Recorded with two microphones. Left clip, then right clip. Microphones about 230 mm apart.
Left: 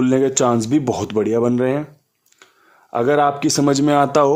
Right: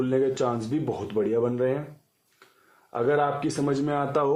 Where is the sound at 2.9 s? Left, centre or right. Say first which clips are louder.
Left 8 dB; left.